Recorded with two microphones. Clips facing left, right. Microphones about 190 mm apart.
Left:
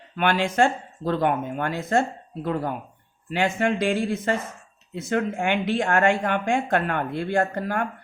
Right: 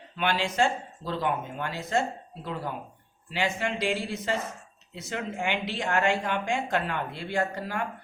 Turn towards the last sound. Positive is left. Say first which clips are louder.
# left 6 dB
turn(degrees=50)  # may be behind; listen again after turning